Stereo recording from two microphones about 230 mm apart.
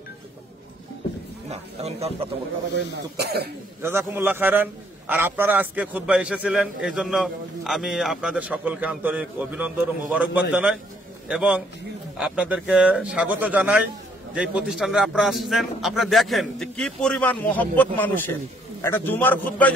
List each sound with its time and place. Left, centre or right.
1.5 s speech: right
2.7 s speech: right
3.8 s a man's voice: centre